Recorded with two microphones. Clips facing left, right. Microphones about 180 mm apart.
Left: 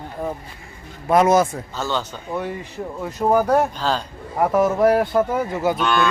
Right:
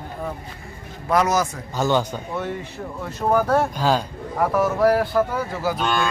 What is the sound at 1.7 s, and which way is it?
Speech, 15° right (ahead or behind).